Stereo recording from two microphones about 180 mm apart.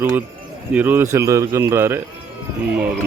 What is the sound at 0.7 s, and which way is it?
Speech, 10° right (ahead or behind).